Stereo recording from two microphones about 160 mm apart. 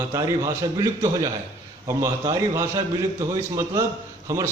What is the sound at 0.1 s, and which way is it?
A man's voice, 25° right (ahead or behind).